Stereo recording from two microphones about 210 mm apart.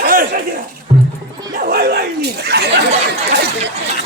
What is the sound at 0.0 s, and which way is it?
Chuckle, 45° right (ahead or behind).